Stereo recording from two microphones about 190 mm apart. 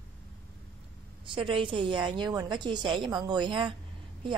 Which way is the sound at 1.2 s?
25° right (ahead or behind).